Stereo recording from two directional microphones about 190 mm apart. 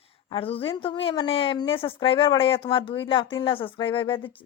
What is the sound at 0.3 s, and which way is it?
A woman's voice, 30° left (ahead or behind).